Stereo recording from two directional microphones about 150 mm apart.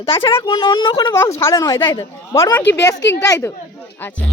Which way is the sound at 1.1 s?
20° left (ahead or behind).